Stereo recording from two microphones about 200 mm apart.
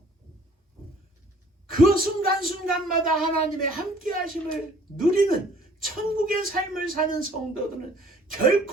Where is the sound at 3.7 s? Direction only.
45° right (ahead or behind).